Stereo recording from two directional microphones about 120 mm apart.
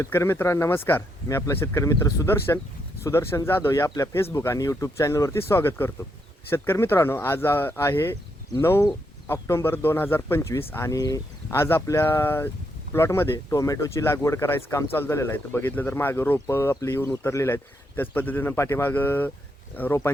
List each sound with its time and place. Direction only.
0.0 s speech: 20° left (ahead or behind)